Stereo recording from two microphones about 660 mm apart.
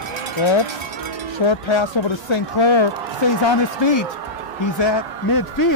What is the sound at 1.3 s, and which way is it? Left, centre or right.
Speech, left.